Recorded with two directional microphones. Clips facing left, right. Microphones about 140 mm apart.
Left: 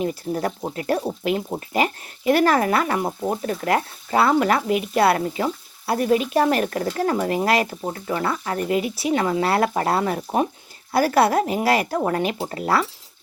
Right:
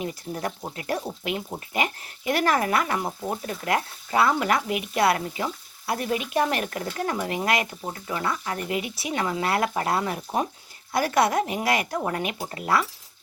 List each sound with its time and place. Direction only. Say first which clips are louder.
0.0 s speech: left 6 dB; 30° left (ahead or behind)